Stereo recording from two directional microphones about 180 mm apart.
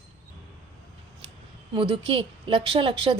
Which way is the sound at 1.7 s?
30° right (ahead or behind).